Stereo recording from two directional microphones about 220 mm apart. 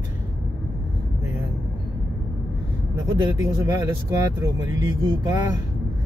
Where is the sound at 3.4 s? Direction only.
15° right (ahead or behind).